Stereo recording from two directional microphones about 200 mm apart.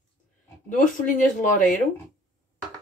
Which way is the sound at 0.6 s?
40° left (ahead or behind).